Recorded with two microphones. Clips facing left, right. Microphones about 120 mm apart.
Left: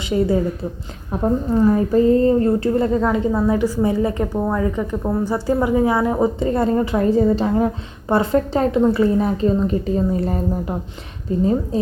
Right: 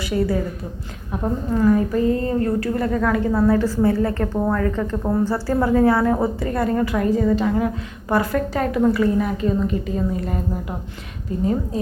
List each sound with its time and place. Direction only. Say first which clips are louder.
0.0 s a woman's voice: left 3 dB; 25° left (ahead or behind)